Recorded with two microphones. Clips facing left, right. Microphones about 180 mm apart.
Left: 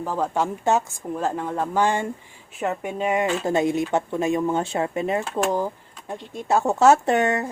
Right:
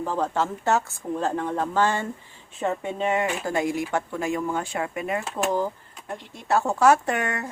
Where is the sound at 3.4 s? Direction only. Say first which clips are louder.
Left 4 dB; 25° left (ahead or behind).